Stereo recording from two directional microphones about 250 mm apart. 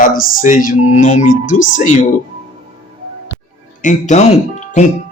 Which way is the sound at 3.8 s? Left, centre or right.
Left.